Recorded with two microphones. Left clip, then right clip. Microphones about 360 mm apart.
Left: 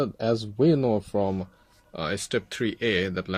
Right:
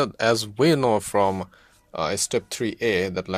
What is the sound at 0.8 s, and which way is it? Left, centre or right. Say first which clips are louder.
Speech: right 5 dB; right.